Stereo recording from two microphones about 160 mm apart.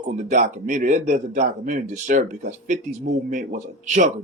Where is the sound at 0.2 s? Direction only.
50° right (ahead or behind).